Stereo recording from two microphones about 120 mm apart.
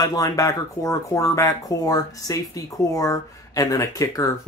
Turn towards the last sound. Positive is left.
turn(degrees=30)  # may be behind; listen again after turning